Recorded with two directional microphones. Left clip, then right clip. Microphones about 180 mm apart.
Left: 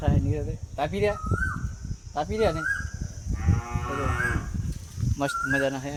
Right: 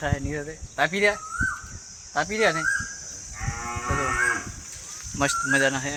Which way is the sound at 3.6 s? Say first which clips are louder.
Right 5 dB; 50° left (ahead or behind).